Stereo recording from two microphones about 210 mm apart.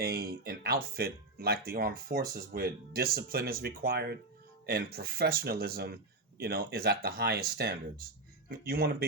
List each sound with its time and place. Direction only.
0.0 s speech: 45° right (ahead or behind)